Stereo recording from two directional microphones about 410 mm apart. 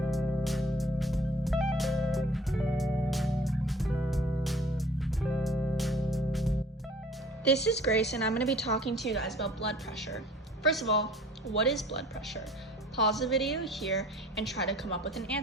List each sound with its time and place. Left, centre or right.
0.1 s music: centre
7.5 s speech: left
8.3 s a woman's voice: centre
10.7 s a woman's voice: centre
13.1 s a woman's voice: centre